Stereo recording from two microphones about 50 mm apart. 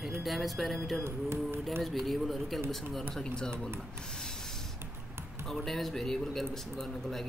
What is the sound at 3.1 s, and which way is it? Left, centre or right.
Speech, centre.